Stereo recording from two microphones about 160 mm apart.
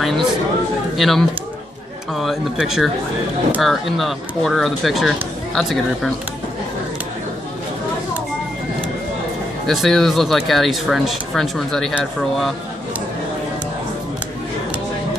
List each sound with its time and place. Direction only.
0.0 s speech: centre (ahead or behind)
9.7 s speech: centre (ahead or behind)